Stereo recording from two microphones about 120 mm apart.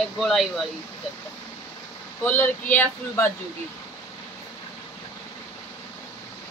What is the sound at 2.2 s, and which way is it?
Speech, 15° left (ahead or behind).